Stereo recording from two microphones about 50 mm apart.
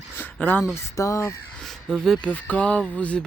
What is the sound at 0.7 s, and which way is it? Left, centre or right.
Speech, left.